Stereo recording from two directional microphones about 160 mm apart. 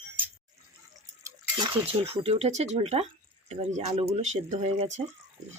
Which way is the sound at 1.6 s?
35° right (ahead or behind).